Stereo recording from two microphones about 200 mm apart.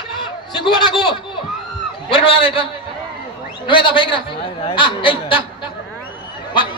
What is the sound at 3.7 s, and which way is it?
Speech, 25° left (ahead or behind).